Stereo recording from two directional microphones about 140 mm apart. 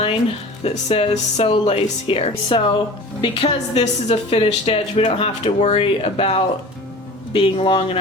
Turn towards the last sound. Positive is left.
turn(degrees=40)  # may be behind; listen again after turning